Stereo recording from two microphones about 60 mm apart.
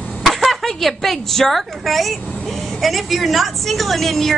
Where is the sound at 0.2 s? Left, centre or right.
Centre.